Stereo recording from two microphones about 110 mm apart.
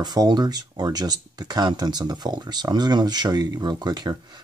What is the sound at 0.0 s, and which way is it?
Speech, 40° right (ahead or behind).